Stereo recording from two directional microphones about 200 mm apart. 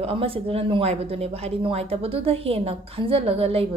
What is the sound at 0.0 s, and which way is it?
A woman's voice, 30° right (ahead or behind).